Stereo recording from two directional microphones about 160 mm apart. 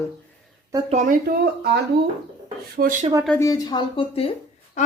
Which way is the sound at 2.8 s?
65° right (ahead or behind).